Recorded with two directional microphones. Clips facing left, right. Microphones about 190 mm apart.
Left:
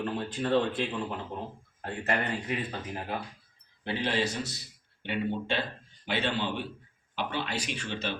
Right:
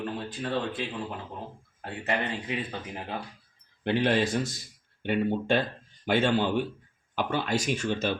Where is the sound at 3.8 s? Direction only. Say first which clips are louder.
Right 5 dB; 55° right (ahead or behind).